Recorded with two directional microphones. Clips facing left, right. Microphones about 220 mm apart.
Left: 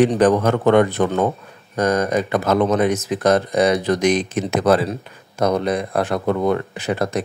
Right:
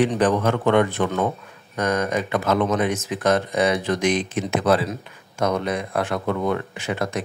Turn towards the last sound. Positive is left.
turn(degrees=35)  # may be behind; listen again after turning